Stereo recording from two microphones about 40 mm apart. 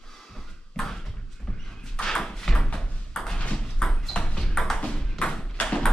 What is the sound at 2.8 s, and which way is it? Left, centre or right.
Ping, centre.